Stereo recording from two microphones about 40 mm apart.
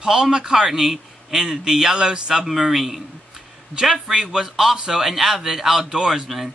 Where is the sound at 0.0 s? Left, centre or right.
Centre.